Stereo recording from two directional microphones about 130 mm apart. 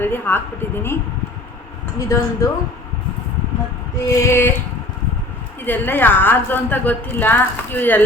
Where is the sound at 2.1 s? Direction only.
25° left (ahead or behind).